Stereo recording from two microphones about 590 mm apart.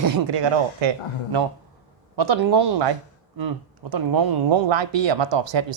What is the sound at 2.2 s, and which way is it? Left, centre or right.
Speech, right.